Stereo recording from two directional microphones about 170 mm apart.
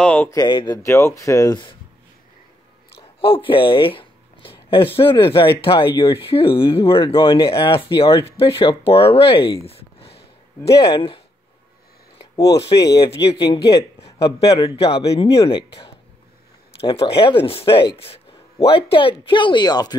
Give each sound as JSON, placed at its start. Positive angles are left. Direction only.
{"t": 0.0, "sound": "a sound", "side_deg": 10}
{"t": 0.3, "sound": "speech", "side_deg": 25}
{"t": 0.8, "sound": "speech", "side_deg": 15}
{"t": 3.0, "sound": "speech", "side_deg": 30}
{"t": 12.4, "sound": "speech", "side_deg": 20}
{"t": 17.0, "sound": "speech", "side_deg": 30}